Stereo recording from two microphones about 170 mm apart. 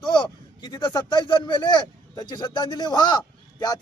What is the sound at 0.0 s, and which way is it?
A man's voice, 25° left (ahead or behind).